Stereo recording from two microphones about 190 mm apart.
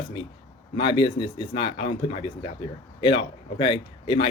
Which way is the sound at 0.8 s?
25° left (ahead or behind).